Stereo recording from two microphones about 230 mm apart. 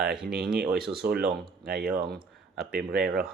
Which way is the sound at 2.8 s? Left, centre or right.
Right.